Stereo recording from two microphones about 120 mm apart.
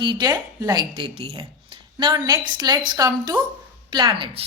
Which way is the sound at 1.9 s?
35° right (ahead or behind).